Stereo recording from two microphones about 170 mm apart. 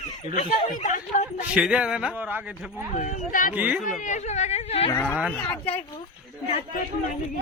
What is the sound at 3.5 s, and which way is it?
Speech, 10° right (ahead or behind).